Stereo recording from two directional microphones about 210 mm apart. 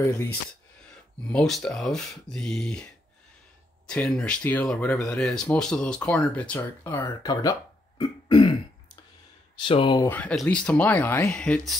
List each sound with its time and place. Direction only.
1.2 s speech: 5° left (ahead or behind)
8.0 s throat clearing: 20° left (ahead or behind)
9.6 s speech: 25° left (ahead or behind)
10.0 s speech: 5° left (ahead or behind)